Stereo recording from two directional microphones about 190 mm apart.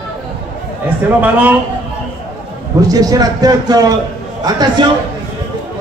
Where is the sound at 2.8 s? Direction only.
20° right (ahead or behind).